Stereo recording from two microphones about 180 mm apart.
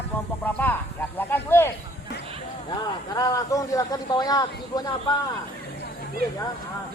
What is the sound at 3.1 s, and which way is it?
A man's voice, 20° left (ahead or behind).